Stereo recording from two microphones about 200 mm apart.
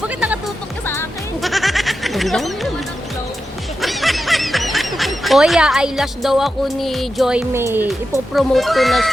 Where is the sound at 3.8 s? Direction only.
Centre (ahead or behind).